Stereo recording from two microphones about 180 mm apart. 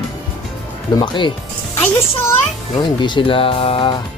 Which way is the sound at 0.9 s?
25° left (ahead or behind).